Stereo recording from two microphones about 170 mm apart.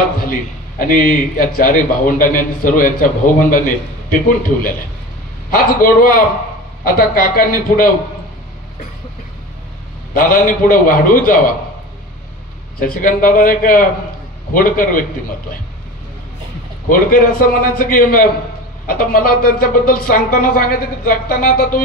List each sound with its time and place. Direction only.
0.3 s a man's voice: 55° left (ahead or behind)
5.5 s speech: 55° left (ahead or behind)
10.1 s a man's voice: 55° left (ahead or behind)
12.8 s a man's voice: 50° left (ahead or behind)
16.9 s a man's voice: 55° left (ahead or behind)